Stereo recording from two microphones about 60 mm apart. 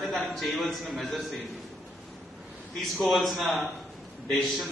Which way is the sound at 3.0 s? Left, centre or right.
Centre.